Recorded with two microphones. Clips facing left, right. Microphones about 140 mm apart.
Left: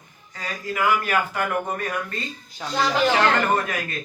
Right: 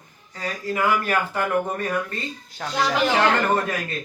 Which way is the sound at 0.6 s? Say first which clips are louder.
Even; 30° right (ahead or behind).